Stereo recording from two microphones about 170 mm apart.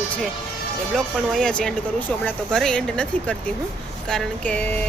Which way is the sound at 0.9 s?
5° left (ahead or behind).